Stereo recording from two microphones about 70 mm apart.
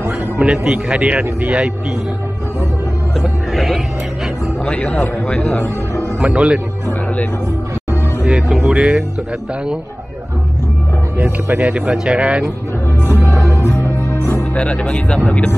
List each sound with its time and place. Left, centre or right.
0.4 s speech: centre
3.2 s music: centre
4.6 s speech: centre
6.2 s speech: centre
8.2 s speech: centre
11.1 s speech: right
13.2 s music: left
14.5 s speech: centre